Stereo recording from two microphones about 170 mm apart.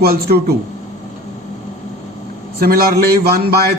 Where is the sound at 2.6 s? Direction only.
65° right (ahead or behind).